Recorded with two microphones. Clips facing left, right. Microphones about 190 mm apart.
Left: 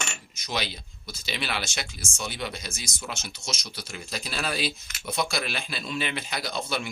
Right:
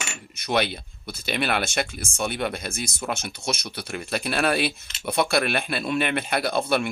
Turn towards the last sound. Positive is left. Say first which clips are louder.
# right 8 dB
turn(degrees=-60)  # may be behind; listen again after turning